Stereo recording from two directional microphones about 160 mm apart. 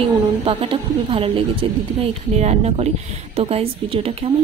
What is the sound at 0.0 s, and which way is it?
A woman's voice, 35° right (ahead or behind).